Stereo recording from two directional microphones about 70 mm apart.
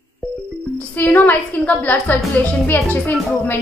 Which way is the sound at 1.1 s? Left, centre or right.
Left.